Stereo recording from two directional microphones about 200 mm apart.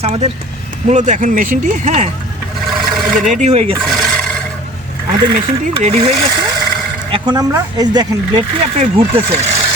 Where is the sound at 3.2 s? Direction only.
35° right (ahead or behind).